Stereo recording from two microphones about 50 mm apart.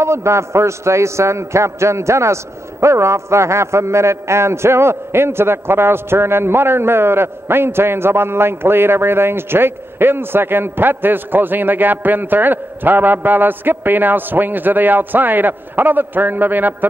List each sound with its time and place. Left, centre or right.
0.0 s a man's voice: right